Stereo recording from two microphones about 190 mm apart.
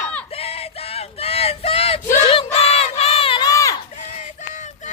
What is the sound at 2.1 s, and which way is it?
Crowd, 30° left (ahead or behind).